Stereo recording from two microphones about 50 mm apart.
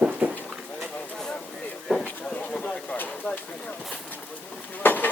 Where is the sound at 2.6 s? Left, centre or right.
Left.